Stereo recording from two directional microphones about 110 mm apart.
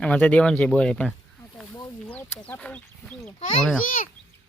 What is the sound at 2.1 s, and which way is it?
Chicken, 15° left (ahead or behind).